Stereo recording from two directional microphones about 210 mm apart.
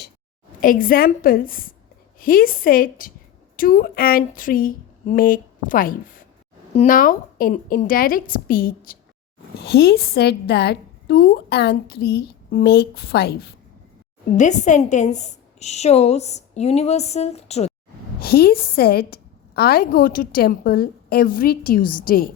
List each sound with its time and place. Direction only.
0.6 s a woman's voice: 40° left (ahead or behind)
14.3 s a woman's voice: 35° left (ahead or behind)
18.2 s a woman's voice: 45° left (ahead or behind)